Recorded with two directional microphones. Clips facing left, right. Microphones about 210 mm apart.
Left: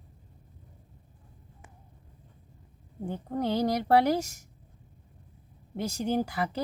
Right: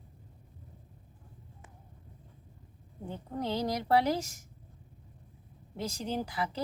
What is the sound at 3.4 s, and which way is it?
Speech, 60° left (ahead or behind).